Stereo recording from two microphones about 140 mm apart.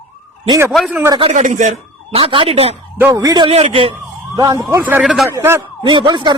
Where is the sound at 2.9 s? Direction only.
20° right (ahead or behind).